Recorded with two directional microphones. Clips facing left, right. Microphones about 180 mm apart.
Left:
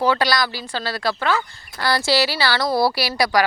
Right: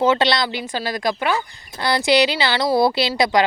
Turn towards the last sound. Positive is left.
turn(degrees=-20)  # may be behind; listen again after turning